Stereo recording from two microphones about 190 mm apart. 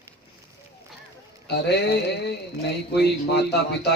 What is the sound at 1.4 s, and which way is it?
Speech, 60° left (ahead or behind).